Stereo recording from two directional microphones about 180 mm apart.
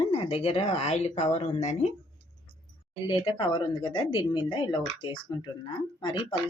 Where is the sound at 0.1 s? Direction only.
30° left (ahead or behind).